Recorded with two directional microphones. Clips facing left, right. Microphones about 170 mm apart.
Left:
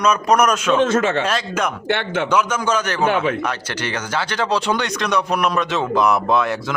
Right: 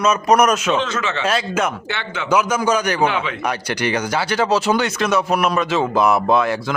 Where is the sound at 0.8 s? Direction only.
50° left (ahead or behind).